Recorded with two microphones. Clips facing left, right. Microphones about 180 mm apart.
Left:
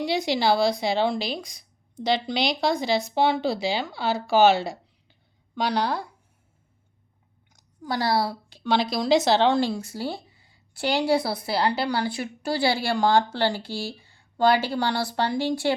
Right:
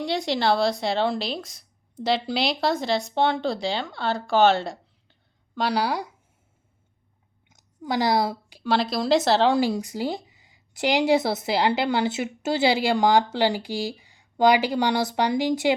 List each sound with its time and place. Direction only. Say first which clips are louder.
0.0 s speech: left 1 dB; centre (ahead or behind); by 6.1 s 15° right (ahead or behind)
7.5 s a sound: right 3 dB; 20° right (ahead or behind)
8.7 s speech: even; centre (ahead or behind); by 15.7 s 15° right (ahead or behind)